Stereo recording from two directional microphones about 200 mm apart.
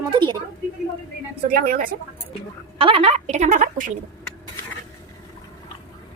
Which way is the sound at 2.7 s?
30° right (ahead or behind).